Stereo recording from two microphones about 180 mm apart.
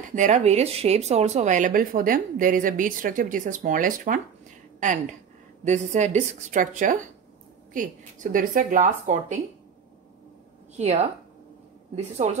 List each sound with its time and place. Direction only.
0.1 s speech: 40° right (ahead or behind)
5.6 s speech: 40° right (ahead or behind)
10.8 s speech: 40° right (ahead or behind)